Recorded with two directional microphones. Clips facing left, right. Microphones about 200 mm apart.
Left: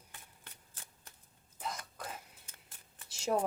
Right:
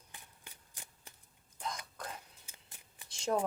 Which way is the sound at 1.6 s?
5° left (ahead or behind).